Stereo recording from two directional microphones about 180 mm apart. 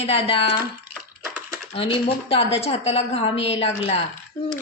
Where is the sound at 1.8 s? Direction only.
30° left (ahead or behind).